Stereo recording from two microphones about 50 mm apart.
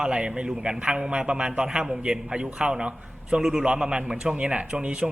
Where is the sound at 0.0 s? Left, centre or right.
Right.